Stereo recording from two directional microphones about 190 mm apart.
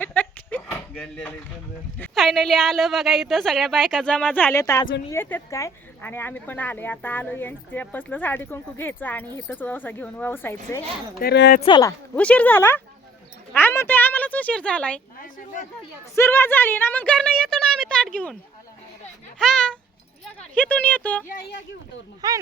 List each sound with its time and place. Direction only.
0.0 s a sound: 10° left (ahead or behind)
2.0 s a woman's voice: centre (ahead or behind)
11.2 s speech: 60° left (ahead or behind)
11.6 s speech: 20° left (ahead or behind)
12.1 s speech: 5° left (ahead or behind)
16.1 s a woman's voice: 10° left (ahead or behind)
19.4 s a sound: 5° left (ahead or behind)
20.6 s speech: 10° left (ahead or behind)
21.2 s speech: 50° left (ahead or behind)
22.2 s speech: 20° right (ahead or behind)